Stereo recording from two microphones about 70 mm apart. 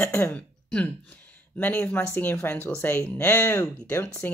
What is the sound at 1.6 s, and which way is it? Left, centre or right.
Speech, left.